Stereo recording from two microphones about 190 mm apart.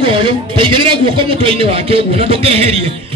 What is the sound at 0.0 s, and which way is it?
A man's voice, 30° right (ahead or behind).